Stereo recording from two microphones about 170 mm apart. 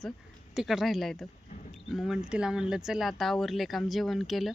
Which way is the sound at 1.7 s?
Centre (ahead or behind).